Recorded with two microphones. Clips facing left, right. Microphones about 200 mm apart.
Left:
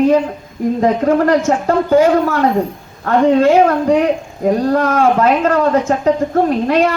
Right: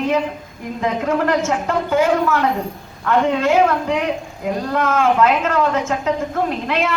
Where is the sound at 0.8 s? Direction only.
35° left (ahead or behind).